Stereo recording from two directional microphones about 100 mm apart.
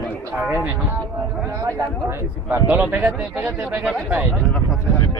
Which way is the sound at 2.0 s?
15° right (ahead or behind).